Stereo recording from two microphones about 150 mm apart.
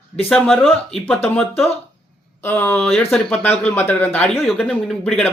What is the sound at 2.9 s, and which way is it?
Speech, centre (ahead or behind).